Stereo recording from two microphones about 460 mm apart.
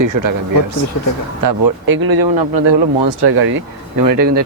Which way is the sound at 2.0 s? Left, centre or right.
Right.